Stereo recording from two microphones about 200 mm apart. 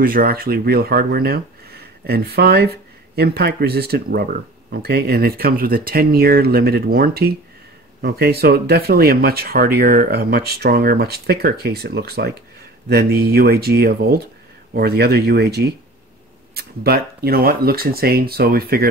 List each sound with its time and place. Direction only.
0.0 s speech: 45° right (ahead or behind)